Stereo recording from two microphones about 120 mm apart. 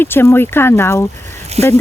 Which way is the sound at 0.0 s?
20° left (ahead or behind).